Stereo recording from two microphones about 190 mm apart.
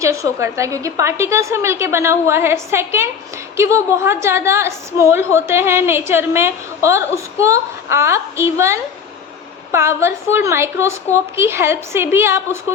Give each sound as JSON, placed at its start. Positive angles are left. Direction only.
{"t": 0.0, "sound": "a woman's voice", "side_deg": -15}